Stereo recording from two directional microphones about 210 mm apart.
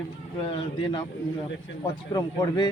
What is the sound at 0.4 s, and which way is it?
Speech, 25° left (ahead or behind).